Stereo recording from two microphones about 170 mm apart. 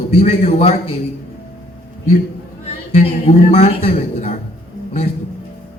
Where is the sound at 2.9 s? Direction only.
40° left (ahead or behind).